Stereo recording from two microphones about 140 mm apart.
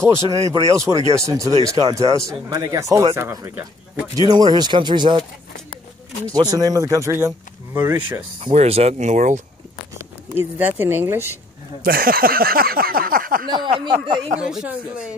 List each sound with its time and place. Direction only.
0.1 s speech: 20° right (ahead or behind)
4.3 s speech: 30° right (ahead or behind)
6.3 s speech: 25° right (ahead or behind)
8.5 s speech: 45° right (ahead or behind)
10.3 s speech: 15° right (ahead or behind)
11.8 s speech: 90° right
13.5 s speech: 35° right (ahead or behind)
14.4 s speech: 5° right (ahead or behind)